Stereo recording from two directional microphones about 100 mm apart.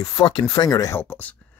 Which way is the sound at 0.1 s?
50° left (ahead or behind).